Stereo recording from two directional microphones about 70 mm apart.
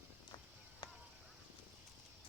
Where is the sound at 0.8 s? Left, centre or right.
Left.